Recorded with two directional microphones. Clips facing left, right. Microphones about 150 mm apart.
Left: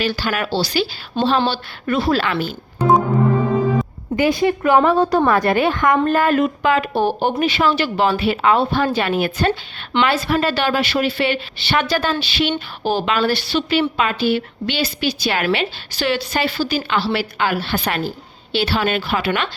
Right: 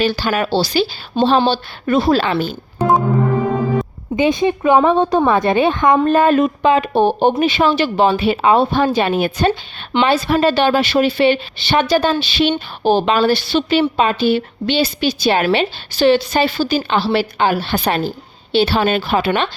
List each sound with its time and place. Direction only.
0.0 s a woman's voice: 25° right (ahead or behind)
4.1 s a woman's voice: 20° right (ahead or behind)